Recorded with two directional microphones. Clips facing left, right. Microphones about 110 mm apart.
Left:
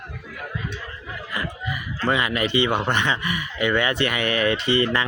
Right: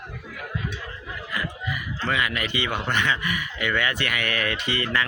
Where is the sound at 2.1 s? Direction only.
25° left (ahead or behind).